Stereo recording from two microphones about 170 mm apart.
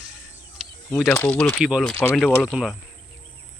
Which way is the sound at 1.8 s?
10° left (ahead or behind).